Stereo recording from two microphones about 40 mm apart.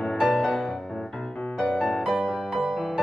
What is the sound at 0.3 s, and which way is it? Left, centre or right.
Music, centre.